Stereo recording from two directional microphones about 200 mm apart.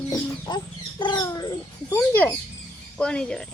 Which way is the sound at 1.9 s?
10° left (ahead or behind).